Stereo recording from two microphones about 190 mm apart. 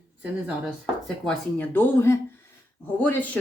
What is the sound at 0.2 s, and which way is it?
Speech, 5° right (ahead or behind).